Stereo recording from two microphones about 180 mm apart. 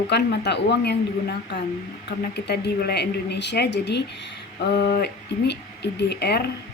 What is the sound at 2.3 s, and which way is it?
A woman's voice, 65° left (ahead or behind).